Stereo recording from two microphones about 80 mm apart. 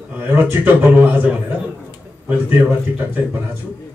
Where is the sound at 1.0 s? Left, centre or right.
Right.